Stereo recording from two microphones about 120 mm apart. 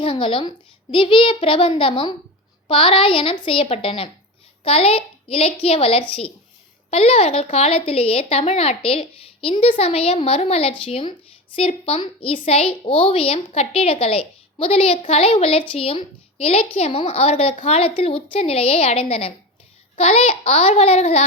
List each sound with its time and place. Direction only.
0.0 s a woman's voice: 45° left (ahead or behind)